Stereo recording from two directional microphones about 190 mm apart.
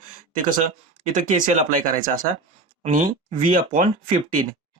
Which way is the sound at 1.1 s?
40° right (ahead or behind).